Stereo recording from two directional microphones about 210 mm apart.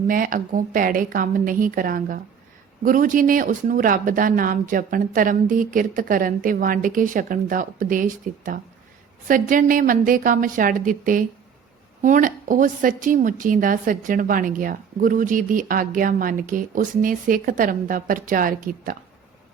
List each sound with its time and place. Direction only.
0.1 s a woman's voice: 40° right (ahead or behind)